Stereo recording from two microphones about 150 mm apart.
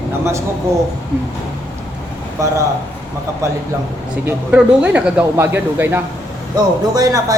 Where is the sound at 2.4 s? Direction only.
20° right (ahead or behind).